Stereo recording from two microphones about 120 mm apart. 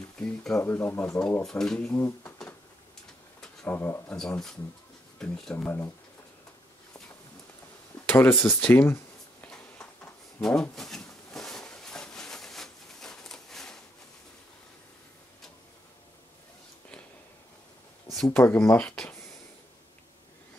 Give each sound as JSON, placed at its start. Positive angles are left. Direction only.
{"t": 0.2, "sound": "speech", "side_deg": 5}
{"t": 1.4, "sound": "speech", "side_deg": 5}
{"t": 1.9, "sound": "speech", "side_deg": 20}
{"t": 3.3, "sound": "speech", "side_deg": 15}
{"t": 5.2, "sound": "speech", "side_deg": 5}
{"t": 8.1, "sound": "speech", "side_deg": 15}
{"t": 8.5, "sound": "a sound", "side_deg": 15}
{"t": 10.4, "sound": "a sound", "side_deg": 5}
{"t": 18.0, "sound": "a sound", "side_deg": 5}
{"t": 18.3, "sound": "speech", "side_deg": 20}